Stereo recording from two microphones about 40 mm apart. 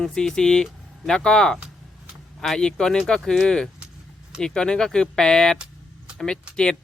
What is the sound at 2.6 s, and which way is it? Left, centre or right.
Speech, centre.